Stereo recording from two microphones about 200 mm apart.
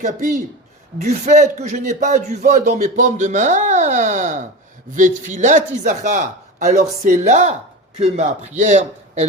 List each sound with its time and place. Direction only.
0.0 s a man's voice: 40° right (ahead or behind)